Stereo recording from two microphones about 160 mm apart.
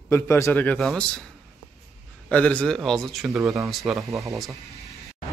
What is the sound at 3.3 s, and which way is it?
Speech, 15° right (ahead or behind).